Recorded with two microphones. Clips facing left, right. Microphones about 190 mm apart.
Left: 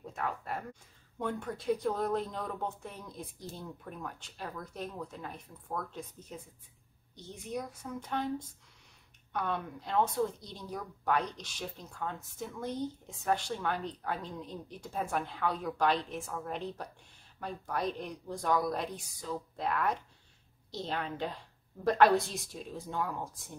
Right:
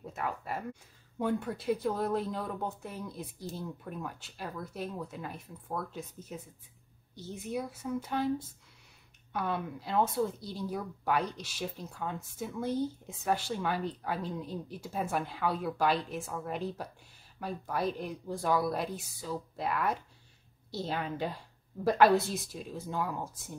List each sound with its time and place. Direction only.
0.0 s a woman's voice: 5° right (ahead or behind)